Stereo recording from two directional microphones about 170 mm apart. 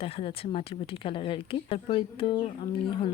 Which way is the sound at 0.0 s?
35° left (ahead or behind).